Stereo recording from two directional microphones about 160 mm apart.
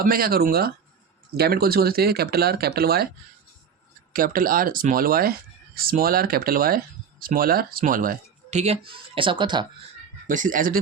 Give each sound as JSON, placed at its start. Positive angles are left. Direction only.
{"t": 0.0, "sound": "speech", "side_deg": -65}
{"t": 4.1, "sound": "speech", "side_deg": -60}
{"t": 10.2, "sound": "speech", "side_deg": -55}